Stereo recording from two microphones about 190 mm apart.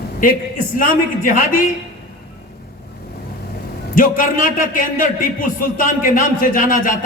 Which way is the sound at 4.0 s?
45° left (ahead or behind).